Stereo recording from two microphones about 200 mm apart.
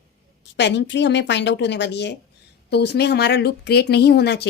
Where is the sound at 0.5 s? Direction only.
60° left (ahead or behind).